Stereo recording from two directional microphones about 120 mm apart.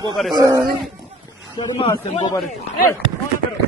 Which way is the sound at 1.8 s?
55° left (ahead or behind).